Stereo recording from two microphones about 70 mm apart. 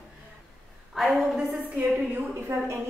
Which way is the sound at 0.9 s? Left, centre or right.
Centre.